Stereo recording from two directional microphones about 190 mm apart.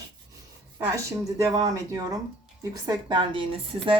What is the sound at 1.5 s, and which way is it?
A woman's voice, 20° right (ahead or behind).